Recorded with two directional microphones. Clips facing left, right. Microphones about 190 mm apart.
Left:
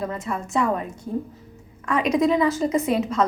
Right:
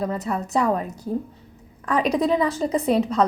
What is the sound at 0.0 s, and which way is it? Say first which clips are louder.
A woman's voice: right 3 dB; 35° right (ahead or behind).